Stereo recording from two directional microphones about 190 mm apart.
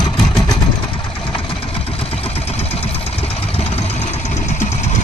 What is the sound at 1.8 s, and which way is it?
Vehicle, 30° left (ahead or behind).